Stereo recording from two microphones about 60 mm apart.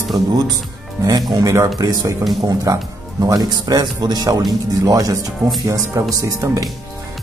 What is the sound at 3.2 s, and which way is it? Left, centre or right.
Speech, right.